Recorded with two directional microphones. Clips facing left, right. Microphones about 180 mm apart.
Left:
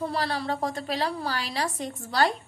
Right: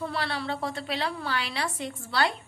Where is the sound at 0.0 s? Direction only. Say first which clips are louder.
Left 3 dB; 40° left (ahead or behind).